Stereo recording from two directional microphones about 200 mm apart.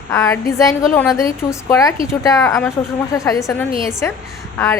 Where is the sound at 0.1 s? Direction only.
15° left (ahead or behind).